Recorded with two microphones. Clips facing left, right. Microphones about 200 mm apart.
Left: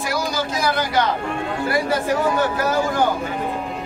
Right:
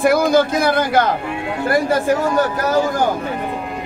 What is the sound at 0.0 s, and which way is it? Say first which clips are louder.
A man's voice: right 10 dB; 55° right (ahead or behind).